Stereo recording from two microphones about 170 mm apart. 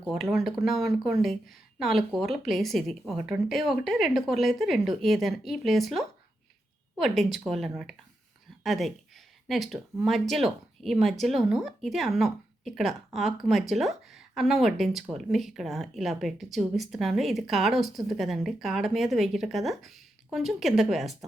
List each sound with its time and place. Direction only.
0.0 s speech: centre (ahead or behind)